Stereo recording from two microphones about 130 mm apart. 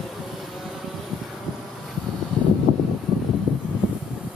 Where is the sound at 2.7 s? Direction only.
60° right (ahead or behind).